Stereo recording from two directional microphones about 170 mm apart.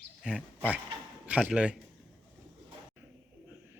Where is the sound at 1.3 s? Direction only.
5° right (ahead or behind).